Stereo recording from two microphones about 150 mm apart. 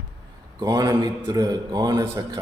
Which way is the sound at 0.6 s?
25° right (ahead or behind).